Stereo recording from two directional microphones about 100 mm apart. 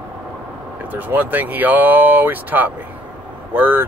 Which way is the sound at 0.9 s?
15° right (ahead or behind).